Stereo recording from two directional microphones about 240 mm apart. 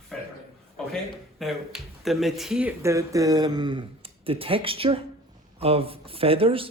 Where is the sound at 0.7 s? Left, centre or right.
Centre.